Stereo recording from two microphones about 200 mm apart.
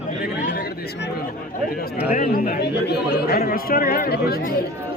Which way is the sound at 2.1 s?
40° left (ahead or behind).